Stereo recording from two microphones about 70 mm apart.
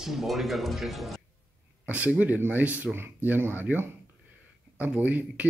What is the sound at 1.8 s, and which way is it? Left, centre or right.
Speech, right.